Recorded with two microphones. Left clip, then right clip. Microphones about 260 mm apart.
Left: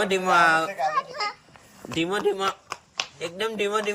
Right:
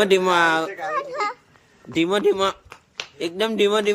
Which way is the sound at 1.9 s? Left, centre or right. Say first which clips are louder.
Right 6 dB; centre.